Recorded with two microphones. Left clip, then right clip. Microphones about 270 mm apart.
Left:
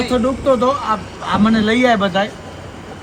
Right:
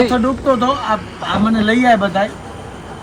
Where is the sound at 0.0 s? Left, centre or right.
Centre.